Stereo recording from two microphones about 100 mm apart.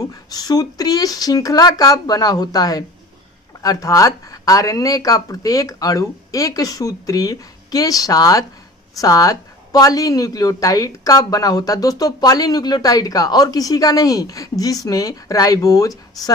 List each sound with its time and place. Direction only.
0.1 s speech: 40° left (ahead or behind)